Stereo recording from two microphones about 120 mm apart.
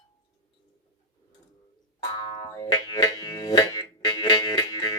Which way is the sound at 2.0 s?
35° left (ahead or behind).